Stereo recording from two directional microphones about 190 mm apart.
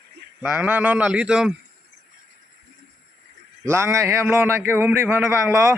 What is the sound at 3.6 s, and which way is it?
A man's voice, 15° right (ahead or behind).